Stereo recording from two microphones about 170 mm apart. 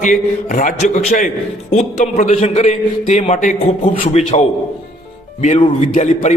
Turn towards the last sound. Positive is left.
turn(degrees=35)  # may be behind; listen again after turning